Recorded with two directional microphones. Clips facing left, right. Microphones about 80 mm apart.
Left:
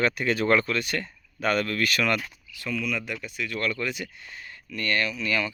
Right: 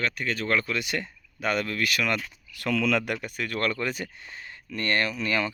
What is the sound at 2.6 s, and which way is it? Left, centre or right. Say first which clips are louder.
Speech: right 5 dB; right.